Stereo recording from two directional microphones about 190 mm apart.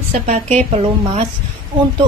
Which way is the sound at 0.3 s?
35° right (ahead or behind).